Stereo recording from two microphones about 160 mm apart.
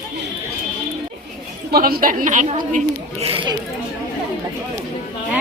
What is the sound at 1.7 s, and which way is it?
Speech, 65° right (ahead or behind).